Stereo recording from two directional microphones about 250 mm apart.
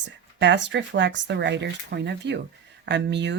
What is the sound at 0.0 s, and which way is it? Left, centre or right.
Speech, right.